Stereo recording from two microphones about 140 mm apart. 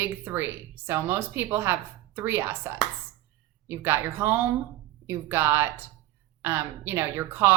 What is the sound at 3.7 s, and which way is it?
A woman's voice, 15° right (ahead or behind).